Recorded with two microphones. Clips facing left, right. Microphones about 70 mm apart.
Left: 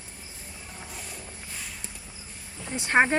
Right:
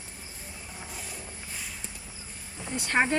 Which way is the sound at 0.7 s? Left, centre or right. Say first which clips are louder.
Even; centre.